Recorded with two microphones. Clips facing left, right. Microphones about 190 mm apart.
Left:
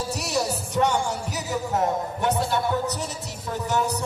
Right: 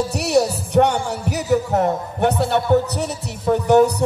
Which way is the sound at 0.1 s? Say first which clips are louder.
Right 8 dB; 65° right (ahead or behind).